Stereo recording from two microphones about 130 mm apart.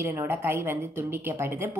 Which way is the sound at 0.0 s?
20° right (ahead or behind).